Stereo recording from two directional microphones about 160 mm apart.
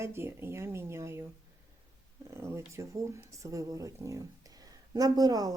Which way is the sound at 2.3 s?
15° right (ahead or behind).